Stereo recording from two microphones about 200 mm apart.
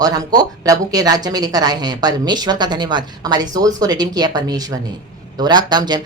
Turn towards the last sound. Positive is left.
turn(degrees=-20)  # may be behind; listen again after turning